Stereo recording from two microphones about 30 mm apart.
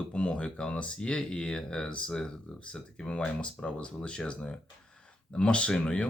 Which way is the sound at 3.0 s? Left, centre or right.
Left.